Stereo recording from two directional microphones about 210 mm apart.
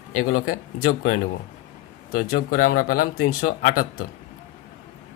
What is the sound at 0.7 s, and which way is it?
Speech, 40° left (ahead or behind).